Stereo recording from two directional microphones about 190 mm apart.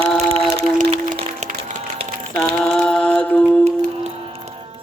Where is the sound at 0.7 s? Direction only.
35° right (ahead or behind).